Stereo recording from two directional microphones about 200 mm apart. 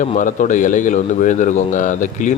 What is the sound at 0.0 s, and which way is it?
A man's voice, 40° left (ahead or behind).